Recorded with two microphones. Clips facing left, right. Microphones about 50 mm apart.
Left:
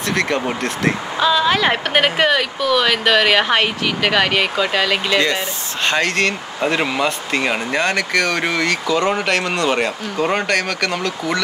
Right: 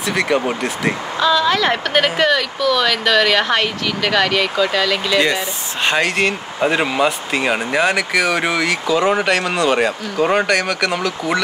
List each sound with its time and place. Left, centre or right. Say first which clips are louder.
0.0 s speech: right 2 dB; centre
1.2 s speech: even; centre
5.9 s speech: right 1 dB; centre